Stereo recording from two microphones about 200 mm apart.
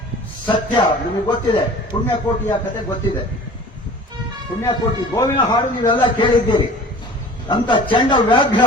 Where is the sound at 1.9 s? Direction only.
20° left (ahead or behind).